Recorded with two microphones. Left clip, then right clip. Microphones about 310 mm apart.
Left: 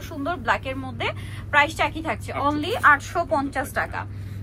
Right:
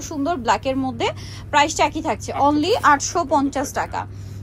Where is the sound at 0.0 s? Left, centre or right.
Centre.